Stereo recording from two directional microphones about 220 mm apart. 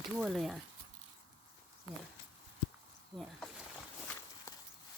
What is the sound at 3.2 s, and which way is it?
Speech, centre (ahead or behind).